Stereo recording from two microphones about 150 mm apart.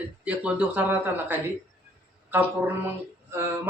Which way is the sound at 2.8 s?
15° right (ahead or behind).